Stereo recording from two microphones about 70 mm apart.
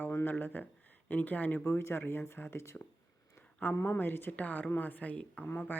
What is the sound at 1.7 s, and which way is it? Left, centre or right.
Speech, left.